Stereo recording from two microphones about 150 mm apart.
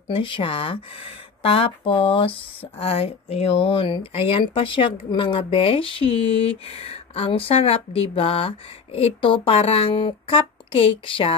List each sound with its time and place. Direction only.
0.1 s speech: 35° left (ahead or behind)